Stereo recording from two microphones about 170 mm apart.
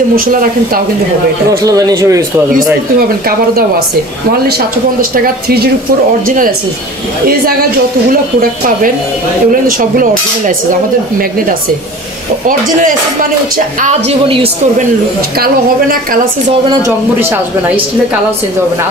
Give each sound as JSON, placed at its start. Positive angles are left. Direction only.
{"t": 0.1, "sound": "a woman's voice", "side_deg": -55}
{"t": 1.6, "sound": "speech", "side_deg": -20}
{"t": 3.0, "sound": "a woman's voice", "side_deg": -60}
{"t": 5.1, "sound": "a woman's voice", "side_deg": -60}
{"t": 8.1, "sound": "a woman's voice", "side_deg": -55}
{"t": 12.4, "sound": "speech", "side_deg": -50}
{"t": 14.2, "sound": "a woman's voice", "side_deg": -30}
{"t": 15.3, "sound": "a woman's voice", "side_deg": -60}
{"t": 16.8, "sound": "speech", "side_deg": -15}